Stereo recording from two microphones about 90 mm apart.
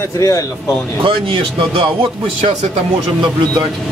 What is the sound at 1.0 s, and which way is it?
Speech, 75° right (ahead or behind).